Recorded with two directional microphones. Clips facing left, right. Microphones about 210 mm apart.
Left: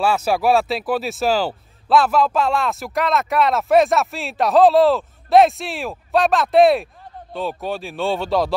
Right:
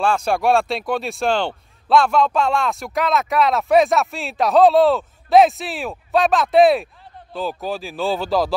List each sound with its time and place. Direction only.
0.0 s speech: 5° left (ahead or behind)